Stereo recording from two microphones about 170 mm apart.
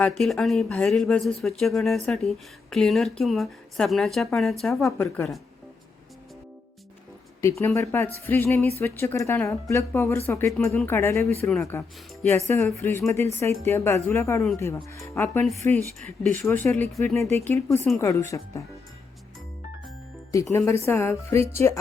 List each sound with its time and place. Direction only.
0.2 s speech: centre (ahead or behind)
4.9 s speech: 15° left (ahead or behind)
7.6 s speech: 15° left (ahead or behind)
20.5 s speech: 15° left (ahead or behind)